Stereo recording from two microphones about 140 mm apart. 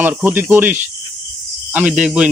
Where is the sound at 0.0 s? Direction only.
15° right (ahead or behind).